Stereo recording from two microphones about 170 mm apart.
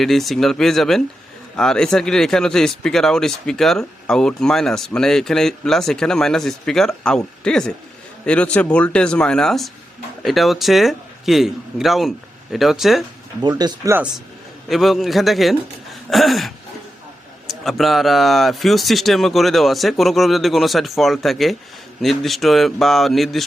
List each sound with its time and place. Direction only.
0.0 s speech: centre (ahead or behind)
13.4 s speech: 25° right (ahead or behind)
14.7 s speech: centre (ahead or behind)
17.5 s speech: centre (ahead or behind)